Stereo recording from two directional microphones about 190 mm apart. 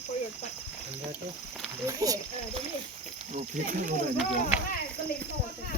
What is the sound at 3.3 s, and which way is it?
Speech, 40° right (ahead or behind).